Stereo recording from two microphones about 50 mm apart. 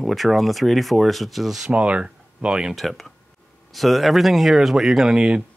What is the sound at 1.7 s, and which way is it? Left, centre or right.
Speech, right.